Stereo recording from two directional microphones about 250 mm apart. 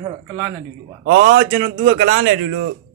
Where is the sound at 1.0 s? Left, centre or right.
Right.